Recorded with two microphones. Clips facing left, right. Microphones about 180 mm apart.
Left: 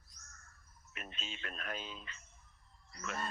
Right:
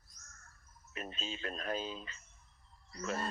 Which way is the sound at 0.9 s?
35° right (ahead or behind).